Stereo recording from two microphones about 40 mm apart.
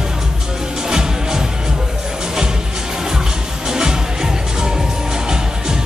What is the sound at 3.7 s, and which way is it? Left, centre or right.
Music, centre.